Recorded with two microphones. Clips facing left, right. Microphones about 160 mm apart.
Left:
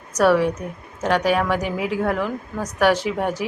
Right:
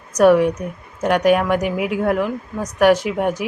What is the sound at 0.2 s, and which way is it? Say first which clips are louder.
A woman's voice: right 4 dB; 15° right (ahead or behind).